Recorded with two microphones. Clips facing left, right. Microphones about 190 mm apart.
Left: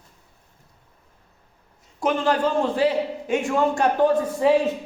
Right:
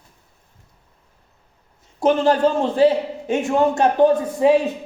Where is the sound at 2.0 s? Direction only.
30° right (ahead or behind).